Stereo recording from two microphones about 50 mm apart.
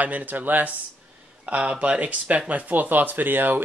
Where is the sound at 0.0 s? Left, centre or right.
Right.